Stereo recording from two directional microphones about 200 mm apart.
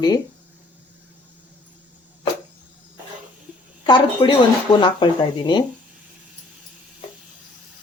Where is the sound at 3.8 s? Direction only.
20° left (ahead or behind).